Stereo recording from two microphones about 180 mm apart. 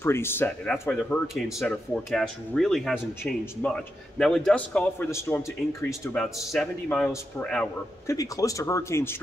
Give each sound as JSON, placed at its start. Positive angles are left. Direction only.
{"t": 0.0, "sound": "speech", "side_deg": 15}
{"t": 1.2, "sound": "speech", "side_deg": 0}
{"t": 5.9, "sound": "speech", "side_deg": 0}
{"t": 8.1, "sound": "speech", "side_deg": 20}